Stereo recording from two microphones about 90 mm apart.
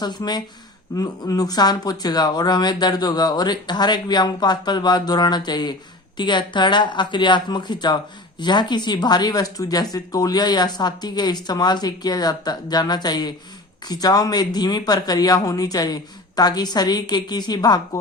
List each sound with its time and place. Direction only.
0.0 s speech: 50° left (ahead or behind)